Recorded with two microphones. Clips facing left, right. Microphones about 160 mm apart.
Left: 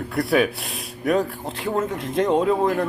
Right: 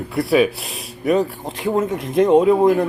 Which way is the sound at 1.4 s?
10° right (ahead or behind).